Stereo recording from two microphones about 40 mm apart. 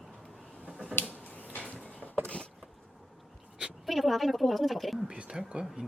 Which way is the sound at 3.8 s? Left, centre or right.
Centre.